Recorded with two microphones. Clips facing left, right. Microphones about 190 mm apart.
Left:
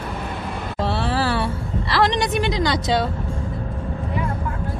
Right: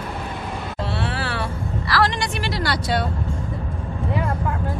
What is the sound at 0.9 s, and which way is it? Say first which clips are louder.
Music: left 6 dB; 35° left (ahead or behind).